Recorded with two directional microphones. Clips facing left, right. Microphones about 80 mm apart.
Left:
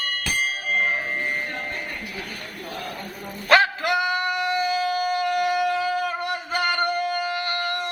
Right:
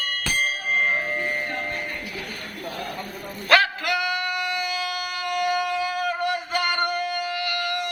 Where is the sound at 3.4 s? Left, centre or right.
Left.